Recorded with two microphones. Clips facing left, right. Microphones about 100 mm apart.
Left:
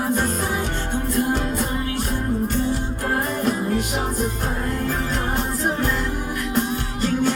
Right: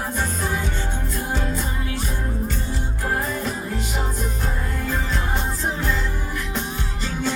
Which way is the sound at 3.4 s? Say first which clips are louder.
Left 6 dB; 55° left (ahead or behind).